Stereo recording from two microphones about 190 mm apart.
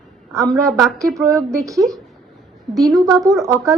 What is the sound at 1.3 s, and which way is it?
Speech, 15° right (ahead or behind).